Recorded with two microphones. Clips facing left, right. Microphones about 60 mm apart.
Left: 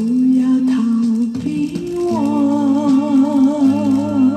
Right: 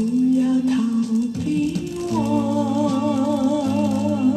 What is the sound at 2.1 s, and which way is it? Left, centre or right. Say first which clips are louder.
Music: left 4 dB; left.